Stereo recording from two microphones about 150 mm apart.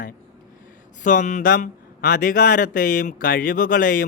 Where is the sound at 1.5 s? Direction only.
75° left (ahead or behind).